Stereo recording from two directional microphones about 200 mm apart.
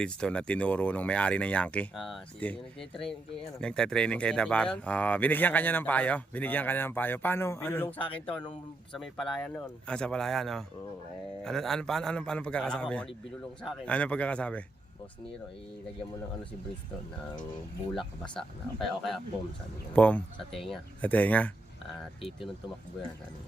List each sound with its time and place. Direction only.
0.0 s speech: 5° left (ahead or behind)
3.6 s speech: 5° left (ahead or behind)
17.9 s speech: centre (ahead or behind)